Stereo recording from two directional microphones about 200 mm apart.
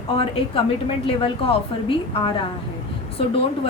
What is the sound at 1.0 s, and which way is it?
A woman's voice, 25° left (ahead or behind).